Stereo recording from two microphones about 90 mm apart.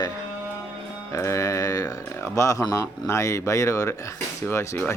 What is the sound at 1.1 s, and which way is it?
Speech, 35° left (ahead or behind).